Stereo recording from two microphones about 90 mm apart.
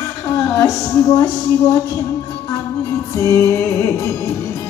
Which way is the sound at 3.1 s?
35° left (ahead or behind).